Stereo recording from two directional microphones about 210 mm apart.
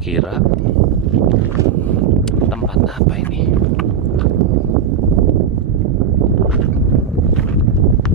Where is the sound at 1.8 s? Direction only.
5° left (ahead or behind).